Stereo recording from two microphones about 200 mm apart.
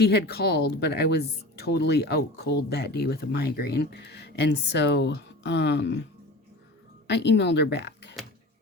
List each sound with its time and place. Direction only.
0.0 s speech: 55° left (ahead or behind)
7.1 s speech: 60° left (ahead or behind)